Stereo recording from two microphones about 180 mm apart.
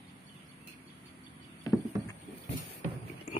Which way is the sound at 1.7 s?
20° left (ahead or behind).